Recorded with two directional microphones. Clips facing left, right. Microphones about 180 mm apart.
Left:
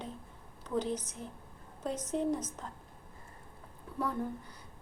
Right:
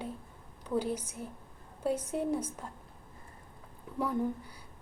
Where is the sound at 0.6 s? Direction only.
10° right (ahead or behind).